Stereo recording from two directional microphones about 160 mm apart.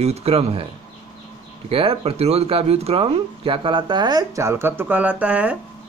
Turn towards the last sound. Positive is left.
turn(degrees=-10)  # may be behind; listen again after turning